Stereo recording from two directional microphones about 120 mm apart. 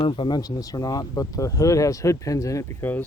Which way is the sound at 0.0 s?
45° left (ahead or behind).